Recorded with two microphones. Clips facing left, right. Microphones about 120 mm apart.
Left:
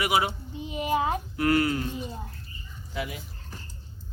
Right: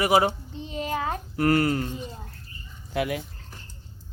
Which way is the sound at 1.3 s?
40° right (ahead or behind).